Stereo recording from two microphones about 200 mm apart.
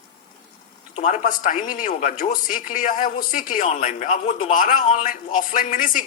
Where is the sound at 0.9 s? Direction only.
35° left (ahead or behind).